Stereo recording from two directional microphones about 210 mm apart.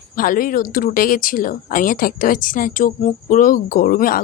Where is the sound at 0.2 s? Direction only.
40° left (ahead or behind).